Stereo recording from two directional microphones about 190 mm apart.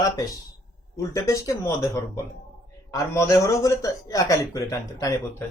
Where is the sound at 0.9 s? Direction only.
15° left (ahead or behind).